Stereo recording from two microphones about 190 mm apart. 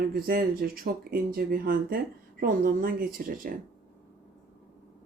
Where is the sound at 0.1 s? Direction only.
50° right (ahead or behind).